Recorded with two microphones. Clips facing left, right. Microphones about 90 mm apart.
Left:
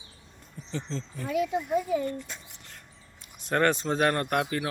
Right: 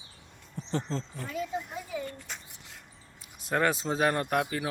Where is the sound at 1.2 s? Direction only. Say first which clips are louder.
Left 9 dB; 65° left (ahead or behind).